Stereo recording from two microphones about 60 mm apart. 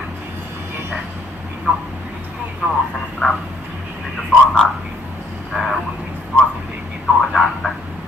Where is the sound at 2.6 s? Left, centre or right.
Centre.